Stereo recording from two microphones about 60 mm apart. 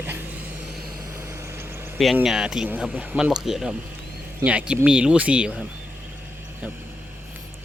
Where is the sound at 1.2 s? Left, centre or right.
Right.